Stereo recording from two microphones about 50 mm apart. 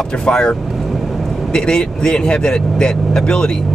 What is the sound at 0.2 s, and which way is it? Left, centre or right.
Speech, centre.